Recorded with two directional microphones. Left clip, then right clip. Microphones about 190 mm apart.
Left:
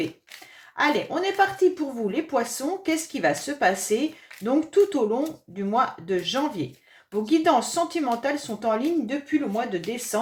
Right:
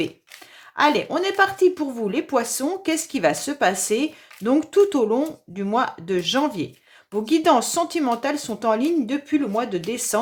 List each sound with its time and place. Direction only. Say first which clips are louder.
0.8 s speech: right 4 dB; 40° right (ahead or behind)